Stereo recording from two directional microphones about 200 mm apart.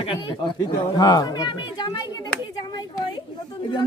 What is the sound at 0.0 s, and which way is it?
Speech, 25° left (ahead or behind).